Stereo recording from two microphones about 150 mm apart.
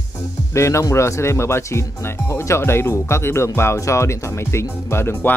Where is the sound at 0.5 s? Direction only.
20° left (ahead or behind).